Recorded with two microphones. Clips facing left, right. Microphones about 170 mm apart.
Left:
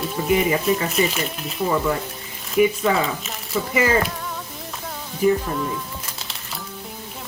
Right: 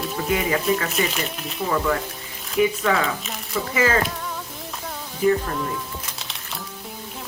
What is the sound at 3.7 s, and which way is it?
Speech, 15° left (ahead or behind).